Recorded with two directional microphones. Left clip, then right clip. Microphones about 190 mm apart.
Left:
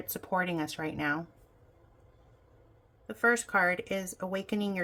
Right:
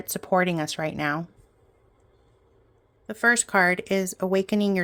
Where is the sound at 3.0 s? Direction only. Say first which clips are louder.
Right 6 dB; 50° right (ahead or behind).